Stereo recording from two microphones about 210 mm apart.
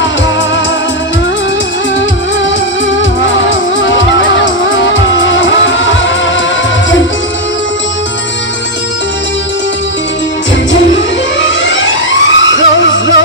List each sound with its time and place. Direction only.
3.0 s music: 65° left (ahead or behind)
11.4 s music: 60° left (ahead or behind)